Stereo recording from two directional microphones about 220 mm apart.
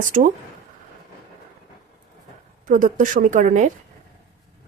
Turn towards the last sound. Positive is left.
turn(degrees=-35)  # may be behind; listen again after turning